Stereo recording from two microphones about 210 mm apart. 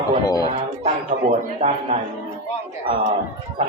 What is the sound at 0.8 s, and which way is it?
A man's voice, 30° right (ahead or behind).